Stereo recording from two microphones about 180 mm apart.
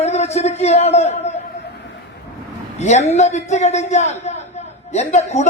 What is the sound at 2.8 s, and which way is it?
Speech, 40° left (ahead or behind).